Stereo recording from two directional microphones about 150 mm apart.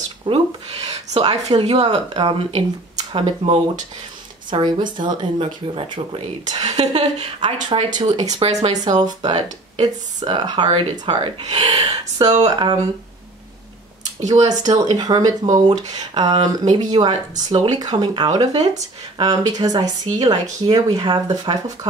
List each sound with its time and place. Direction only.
0.2 s a sound: 40° right (ahead or behind)
1.5 s speech: 40° right (ahead or behind)
4.5 s speech: 30° right (ahead or behind)
6.5 s speech: 45° right (ahead or behind)
7.3 s speech: 30° right (ahead or behind)
8.4 s speech: 45° right (ahead or behind)
8.7 s speech: 25° right (ahead or behind)
12.2 s speech: 50° right (ahead or behind)
14.2 s speech: 25° right (ahead or behind)
17.5 s speech: 25° right (ahead or behind)